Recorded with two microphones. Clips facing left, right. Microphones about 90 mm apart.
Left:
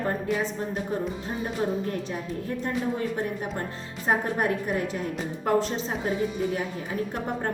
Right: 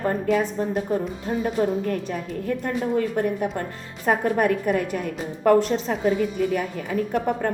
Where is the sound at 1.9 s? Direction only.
55° right (ahead or behind).